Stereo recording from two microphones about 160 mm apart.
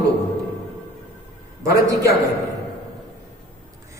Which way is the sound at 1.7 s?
20° right (ahead or behind).